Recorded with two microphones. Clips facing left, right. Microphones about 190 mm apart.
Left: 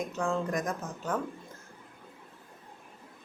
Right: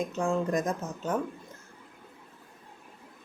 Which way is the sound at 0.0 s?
20° right (ahead or behind).